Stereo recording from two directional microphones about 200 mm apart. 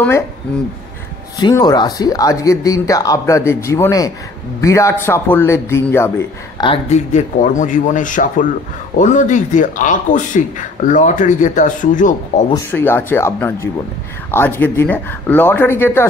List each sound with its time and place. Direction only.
1.4 s speech: 20° left (ahead or behind)
6.6 s speech: 30° left (ahead or behind)
12.7 s speech: 10° left (ahead or behind)